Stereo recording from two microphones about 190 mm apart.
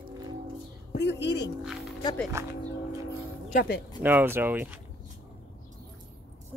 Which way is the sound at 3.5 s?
50° left (ahead or behind).